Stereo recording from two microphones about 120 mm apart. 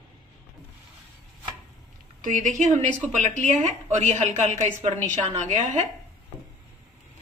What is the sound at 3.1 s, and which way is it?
A woman's voice, 75° right (ahead or behind).